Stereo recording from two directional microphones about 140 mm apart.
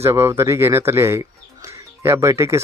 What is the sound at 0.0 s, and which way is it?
Speech, 20° right (ahead or behind).